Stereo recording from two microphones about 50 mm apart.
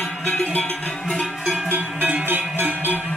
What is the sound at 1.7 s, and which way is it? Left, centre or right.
Music, right.